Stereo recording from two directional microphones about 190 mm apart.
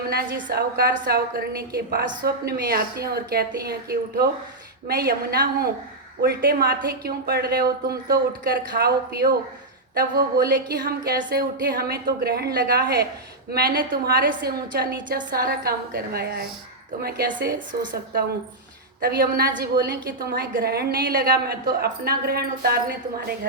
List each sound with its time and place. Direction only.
0.1 s a woman's voice: 55° right (ahead or behind)